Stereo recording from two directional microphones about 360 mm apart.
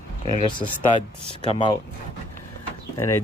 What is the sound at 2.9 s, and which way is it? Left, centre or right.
Speech, centre.